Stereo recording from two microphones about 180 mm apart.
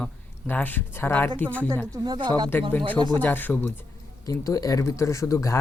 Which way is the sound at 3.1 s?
10° left (ahead or behind).